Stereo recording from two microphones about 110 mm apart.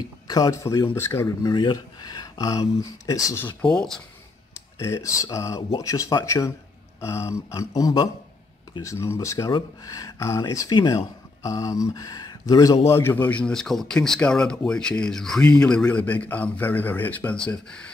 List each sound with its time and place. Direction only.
0.3 s speech: 30° left (ahead or behind)
1.2 s speech: 40° left (ahead or behind)
3.7 s speech: 5° left (ahead or behind)
4.7 s speech: 25° left (ahead or behind); by 17.8 s 10° left (ahead or behind)